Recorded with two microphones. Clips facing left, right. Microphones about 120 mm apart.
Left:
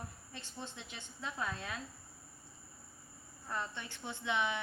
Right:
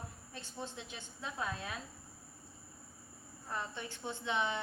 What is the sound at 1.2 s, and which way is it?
Speech, 15° right (ahead or behind).